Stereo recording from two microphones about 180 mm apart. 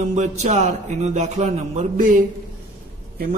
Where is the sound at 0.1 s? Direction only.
40° right (ahead or behind).